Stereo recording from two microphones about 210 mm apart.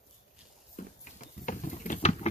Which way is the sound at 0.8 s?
35° left (ahead or behind).